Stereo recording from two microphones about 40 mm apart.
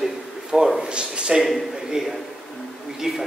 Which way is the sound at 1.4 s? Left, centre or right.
Centre.